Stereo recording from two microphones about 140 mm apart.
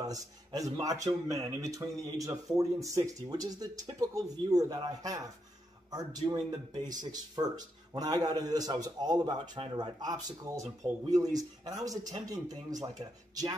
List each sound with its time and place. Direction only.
0.0 s speech: 25° right (ahead or behind)